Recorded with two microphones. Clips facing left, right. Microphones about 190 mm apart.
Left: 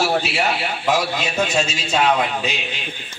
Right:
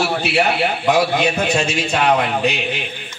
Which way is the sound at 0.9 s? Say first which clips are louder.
Right 4 dB; 60° right (ahead or behind).